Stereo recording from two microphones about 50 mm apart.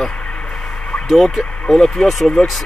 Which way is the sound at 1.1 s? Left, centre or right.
Centre.